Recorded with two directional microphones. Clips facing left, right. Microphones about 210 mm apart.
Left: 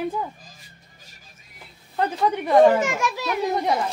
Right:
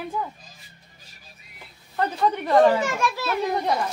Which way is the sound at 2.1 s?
10° left (ahead or behind).